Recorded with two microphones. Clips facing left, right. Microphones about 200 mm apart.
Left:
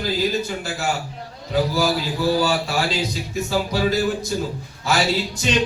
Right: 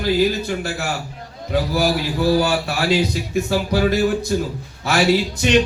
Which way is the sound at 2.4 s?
60° right (ahead or behind).